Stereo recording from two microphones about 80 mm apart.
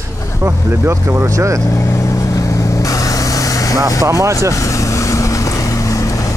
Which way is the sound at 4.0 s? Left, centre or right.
Right.